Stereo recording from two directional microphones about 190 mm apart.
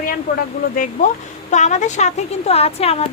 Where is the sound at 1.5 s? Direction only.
40° left (ahead or behind).